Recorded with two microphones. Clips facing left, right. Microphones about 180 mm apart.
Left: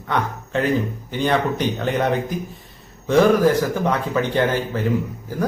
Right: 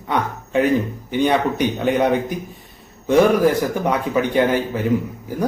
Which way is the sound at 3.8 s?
15° right (ahead or behind).